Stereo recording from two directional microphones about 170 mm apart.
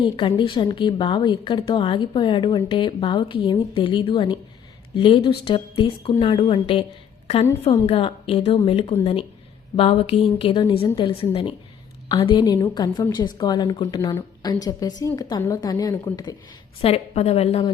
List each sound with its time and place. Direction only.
0.0 s a woman's voice: 30° left (ahead or behind)
7.9 s a woman's voice: 35° left (ahead or behind); by 16.3 s 20° left (ahead or behind)
16.8 s a woman's voice: 35° left (ahead or behind)